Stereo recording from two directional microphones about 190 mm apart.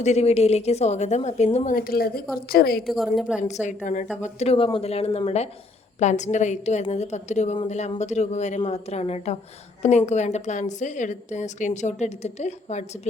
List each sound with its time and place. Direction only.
0.0 s a woman's voice: 35° left (ahead or behind); by 2.8 s 55° left (ahead or behind)
2.8 s a woman's voice: centre (ahead or behind)
3.4 s a woman's voice: 40° left (ahead or behind)